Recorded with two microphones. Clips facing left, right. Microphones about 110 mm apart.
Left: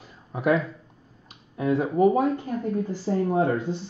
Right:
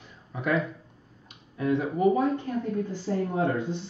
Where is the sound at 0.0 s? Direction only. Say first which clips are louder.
Left 4 dB; 40° left (ahead or behind).